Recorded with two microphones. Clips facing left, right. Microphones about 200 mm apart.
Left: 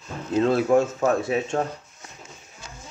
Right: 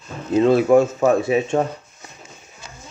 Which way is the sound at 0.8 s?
10° right (ahead or behind).